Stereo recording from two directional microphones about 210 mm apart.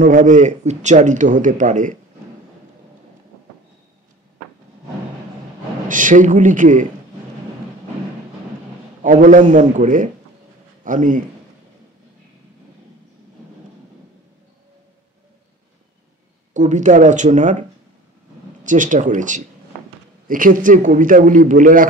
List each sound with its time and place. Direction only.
0.0 s a man's voice: 35° right (ahead or behind)
5.9 s a man's voice: 40° right (ahead or behind)
9.0 s a man's voice: 40° right (ahead or behind)
16.5 s a man's voice: 35° right (ahead or behind)